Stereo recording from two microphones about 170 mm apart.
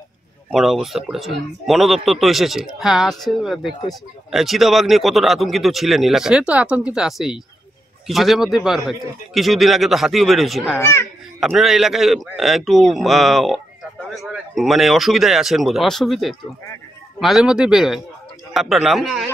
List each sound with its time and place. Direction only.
0.5 s speech: centre (ahead or behind)
10.8 s speech: 15° left (ahead or behind)
11.3 s speech: centre (ahead or behind)